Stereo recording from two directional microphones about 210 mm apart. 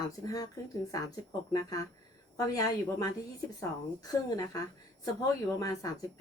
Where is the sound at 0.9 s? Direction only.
15° left (ahead or behind).